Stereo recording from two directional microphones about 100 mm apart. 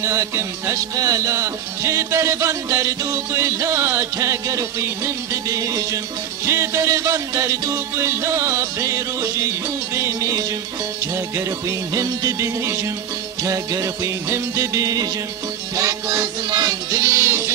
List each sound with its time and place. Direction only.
0.0 s music: 30° right (ahead or behind)
17.1 s music: 25° right (ahead or behind)